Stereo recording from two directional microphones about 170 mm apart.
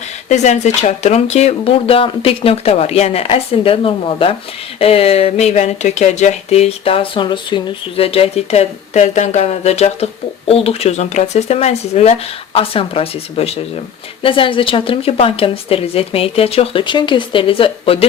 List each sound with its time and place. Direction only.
0.3 s speech: 40° left (ahead or behind)